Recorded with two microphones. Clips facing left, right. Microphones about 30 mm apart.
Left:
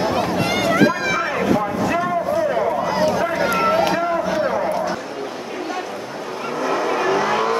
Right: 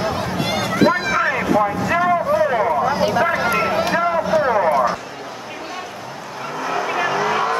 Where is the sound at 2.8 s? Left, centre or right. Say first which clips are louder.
Right 2 dB; centre.